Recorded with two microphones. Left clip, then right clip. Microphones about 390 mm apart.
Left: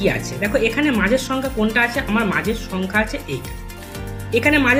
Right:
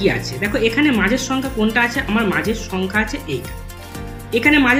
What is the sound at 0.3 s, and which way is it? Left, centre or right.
Speech, left.